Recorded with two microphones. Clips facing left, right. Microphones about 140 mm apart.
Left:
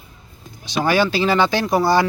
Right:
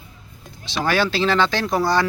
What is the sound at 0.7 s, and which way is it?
Speech, 5° left (ahead or behind).